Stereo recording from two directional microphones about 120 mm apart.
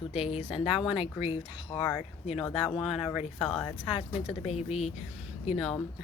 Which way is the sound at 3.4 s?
5° left (ahead or behind).